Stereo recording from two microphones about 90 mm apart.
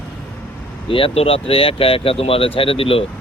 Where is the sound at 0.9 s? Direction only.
90° left.